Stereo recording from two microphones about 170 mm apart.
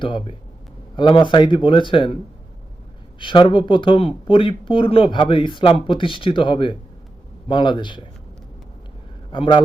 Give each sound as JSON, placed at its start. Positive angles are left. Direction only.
{"t": 0.0, "sound": "speech", "side_deg": 30}
{"t": 3.2, "sound": "speech", "side_deg": 30}
{"t": 9.3, "sound": "speech", "side_deg": 30}